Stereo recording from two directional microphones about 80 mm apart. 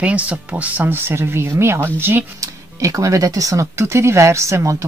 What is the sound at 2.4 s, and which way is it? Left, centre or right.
Speech, right.